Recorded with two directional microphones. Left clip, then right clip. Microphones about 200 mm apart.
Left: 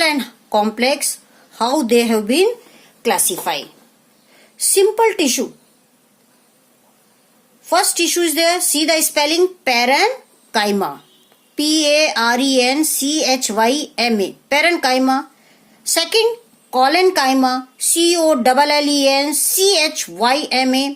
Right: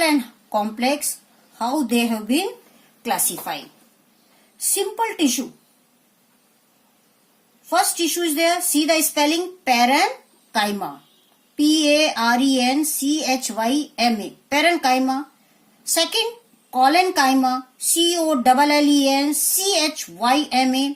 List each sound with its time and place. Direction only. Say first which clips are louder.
0.5 s a woman's voice: left 5 dB; 45° left (ahead or behind)
7.7 s a woman's voice: left 4 dB; 50° left (ahead or behind)